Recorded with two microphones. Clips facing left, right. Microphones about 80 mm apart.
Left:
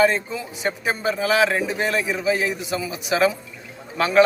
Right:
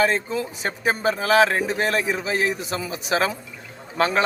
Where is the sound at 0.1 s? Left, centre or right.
Right.